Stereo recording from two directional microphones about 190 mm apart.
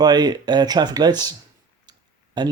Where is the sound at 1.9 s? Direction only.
25° right (ahead or behind).